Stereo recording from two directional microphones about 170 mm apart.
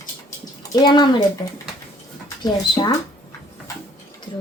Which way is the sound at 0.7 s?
25° left (ahead or behind).